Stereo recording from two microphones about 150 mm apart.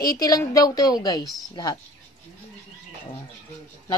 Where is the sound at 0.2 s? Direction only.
20° left (ahead or behind).